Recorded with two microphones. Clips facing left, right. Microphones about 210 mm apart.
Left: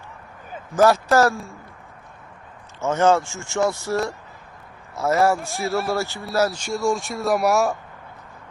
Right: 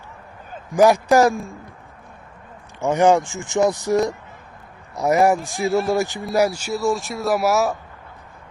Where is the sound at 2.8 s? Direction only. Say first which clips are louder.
Right 2 dB; 15° right (ahead or behind).